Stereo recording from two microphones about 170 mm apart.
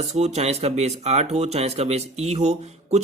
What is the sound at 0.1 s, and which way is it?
Speech, 40° right (ahead or behind).